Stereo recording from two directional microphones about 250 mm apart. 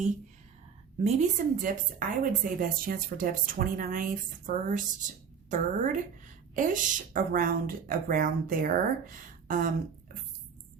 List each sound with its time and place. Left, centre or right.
1.0 s a woman's voice: right